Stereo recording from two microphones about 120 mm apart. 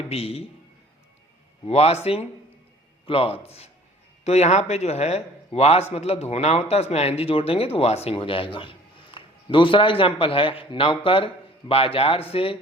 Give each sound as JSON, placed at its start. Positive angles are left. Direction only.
{"t": 0.1, "sound": "speech", "side_deg": 60}
{"t": 1.6, "sound": "a man's voice", "side_deg": 60}